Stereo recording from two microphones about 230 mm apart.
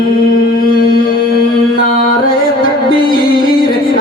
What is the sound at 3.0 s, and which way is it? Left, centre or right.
Music, left.